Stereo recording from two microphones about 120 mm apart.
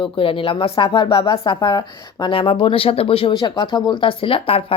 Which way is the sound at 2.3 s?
45° left (ahead or behind).